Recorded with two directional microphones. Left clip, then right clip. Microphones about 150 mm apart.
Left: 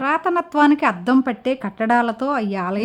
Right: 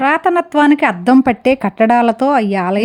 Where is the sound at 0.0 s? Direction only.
25° right (ahead or behind).